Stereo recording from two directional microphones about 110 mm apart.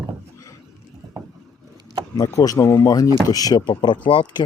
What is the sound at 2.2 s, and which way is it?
Speech, 30° left (ahead or behind).